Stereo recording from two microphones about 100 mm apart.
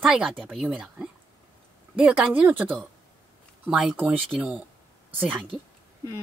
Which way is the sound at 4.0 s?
15° right (ahead or behind).